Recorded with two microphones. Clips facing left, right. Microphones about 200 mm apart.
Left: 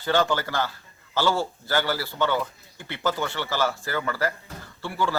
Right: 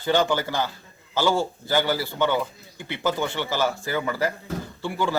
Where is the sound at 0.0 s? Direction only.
15° right (ahead or behind).